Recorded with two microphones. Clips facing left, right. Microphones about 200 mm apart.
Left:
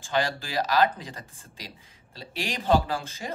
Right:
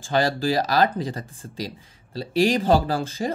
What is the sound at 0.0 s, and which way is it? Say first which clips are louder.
Speech: right 6 dB; 35° right (ahead or behind).